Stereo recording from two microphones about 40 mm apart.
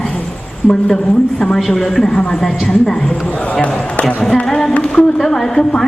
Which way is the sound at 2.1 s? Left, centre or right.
Left.